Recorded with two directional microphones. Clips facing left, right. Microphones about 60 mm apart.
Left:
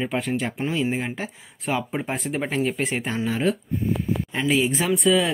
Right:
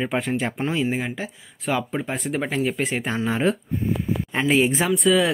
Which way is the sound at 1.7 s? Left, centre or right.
Centre.